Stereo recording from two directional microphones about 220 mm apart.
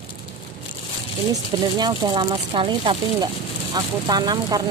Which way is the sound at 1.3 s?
20° right (ahead or behind).